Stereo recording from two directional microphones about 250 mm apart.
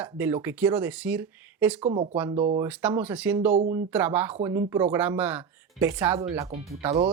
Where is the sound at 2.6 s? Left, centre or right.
Centre.